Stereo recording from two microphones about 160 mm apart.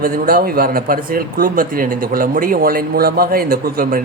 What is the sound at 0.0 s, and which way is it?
Speech, 65° right (ahead or behind).